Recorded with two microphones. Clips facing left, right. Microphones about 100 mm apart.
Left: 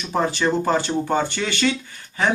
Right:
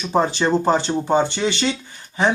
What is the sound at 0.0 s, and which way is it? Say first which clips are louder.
Speech: right 2 dB; 25° right (ahead or behind).